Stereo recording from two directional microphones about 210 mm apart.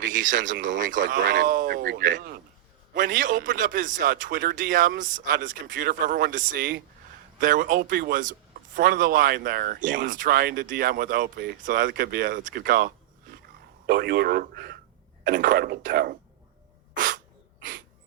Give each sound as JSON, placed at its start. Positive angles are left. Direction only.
{"t": 0.0, "sound": "a man's voice", "side_deg": -40}
{"t": 16.9, "sound": "sneeze", "side_deg": -40}